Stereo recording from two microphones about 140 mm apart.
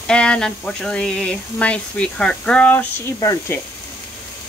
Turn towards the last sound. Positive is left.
turn(degrees=25)  # may be behind; listen again after turning